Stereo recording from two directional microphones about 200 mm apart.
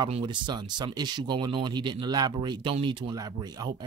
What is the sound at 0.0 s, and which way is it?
Speech, 20° right (ahead or behind).